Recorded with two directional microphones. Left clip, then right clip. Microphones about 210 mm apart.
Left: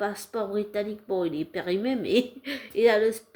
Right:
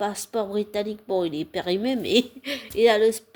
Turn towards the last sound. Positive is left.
turn(degrees=-40)  # may be behind; listen again after turning